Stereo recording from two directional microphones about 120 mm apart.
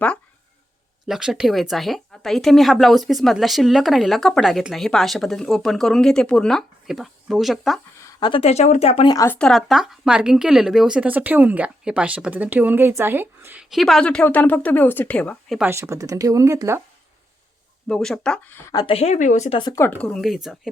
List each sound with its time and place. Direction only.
1.0 s a woman's voice: 5° right (ahead or behind)
8.2 s speech: 50° left (ahead or behind)
9.0 s speech: 30° left (ahead or behind)
9.3 s speech: 5° left (ahead or behind); by 13.7 s 15° right (ahead or behind)
13.7 s speech: centre (ahead or behind)
15.6 s speech: 25° right (ahead or behind)
17.8 s a woman's voice: 5° left (ahead or behind)
18.9 s speech: 55° left (ahead or behind)
19.1 s speech: 90° left
19.5 s speech: 45° left (ahead or behind)
20.0 s a woman's voice: 5° left (ahead or behind)